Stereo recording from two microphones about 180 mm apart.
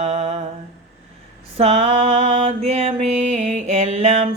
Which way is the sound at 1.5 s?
35° right (ahead or behind).